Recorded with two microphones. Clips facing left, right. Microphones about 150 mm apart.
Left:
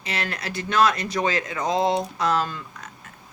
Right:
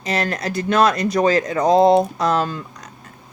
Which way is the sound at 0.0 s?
35° right (ahead or behind).